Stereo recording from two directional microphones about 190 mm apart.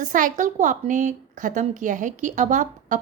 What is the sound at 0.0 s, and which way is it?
A woman's voice, 45° right (ahead or behind).